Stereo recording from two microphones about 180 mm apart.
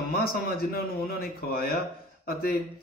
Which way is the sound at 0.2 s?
55° left (ahead or behind).